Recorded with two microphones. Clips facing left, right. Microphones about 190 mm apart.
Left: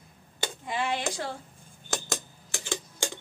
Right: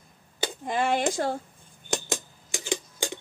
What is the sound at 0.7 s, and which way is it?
Speech, 45° right (ahead or behind).